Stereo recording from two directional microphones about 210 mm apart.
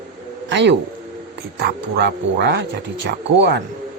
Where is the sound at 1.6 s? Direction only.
50° right (ahead or behind).